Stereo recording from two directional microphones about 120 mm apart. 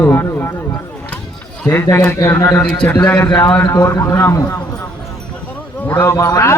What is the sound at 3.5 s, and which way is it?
Speech, 20° left (ahead or behind).